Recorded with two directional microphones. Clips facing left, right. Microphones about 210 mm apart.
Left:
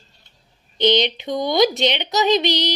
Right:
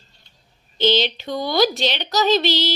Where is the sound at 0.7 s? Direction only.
20° left (ahead or behind).